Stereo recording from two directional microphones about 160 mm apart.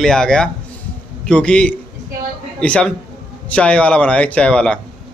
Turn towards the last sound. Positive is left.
turn(degrees=5)  # may be behind; listen again after turning